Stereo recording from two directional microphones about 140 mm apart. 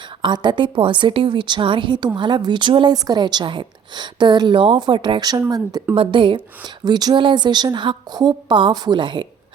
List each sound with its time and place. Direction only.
0.2 s a woman's voice: 30° right (ahead or behind)